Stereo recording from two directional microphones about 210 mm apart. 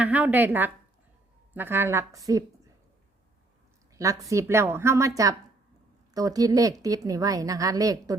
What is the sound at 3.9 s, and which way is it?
A woman's voice, 15° right (ahead or behind).